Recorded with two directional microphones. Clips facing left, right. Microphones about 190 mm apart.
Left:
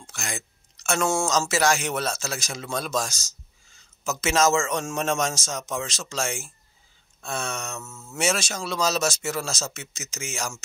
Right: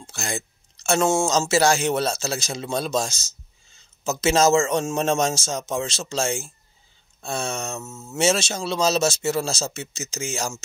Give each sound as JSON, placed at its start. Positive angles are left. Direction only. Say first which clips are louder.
{"t": 0.0, "sound": "speech", "louder": "right 5 dB", "side_deg": -30}